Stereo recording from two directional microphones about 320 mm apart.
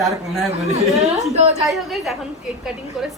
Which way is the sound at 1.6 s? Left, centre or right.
Centre.